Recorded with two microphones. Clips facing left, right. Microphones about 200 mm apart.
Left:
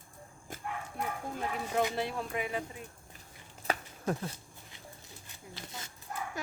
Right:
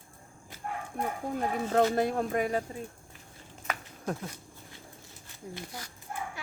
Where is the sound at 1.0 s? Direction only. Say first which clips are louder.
Right 4 dB; 50° right (ahead or behind).